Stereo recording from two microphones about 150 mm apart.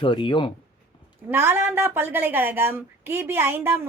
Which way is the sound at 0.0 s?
35° left (ahead or behind).